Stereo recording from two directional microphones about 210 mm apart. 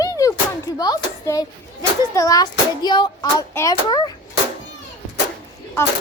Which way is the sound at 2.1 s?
15° left (ahead or behind).